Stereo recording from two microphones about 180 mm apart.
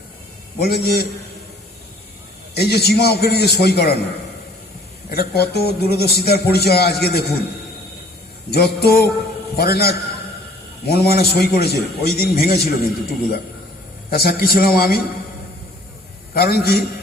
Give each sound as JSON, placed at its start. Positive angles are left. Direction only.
{"t": 0.6, "sound": "a man's voice", "side_deg": 65}
{"t": 2.6, "sound": "a man's voice", "side_deg": 65}
{"t": 5.1, "sound": "a man's voice", "side_deg": 60}
{"t": 8.8, "sound": "a man's voice", "side_deg": 60}
{"t": 16.3, "sound": "a man's voice", "side_deg": 60}